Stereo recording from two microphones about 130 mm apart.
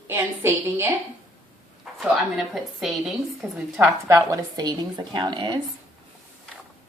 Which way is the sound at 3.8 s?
25° right (ahead or behind).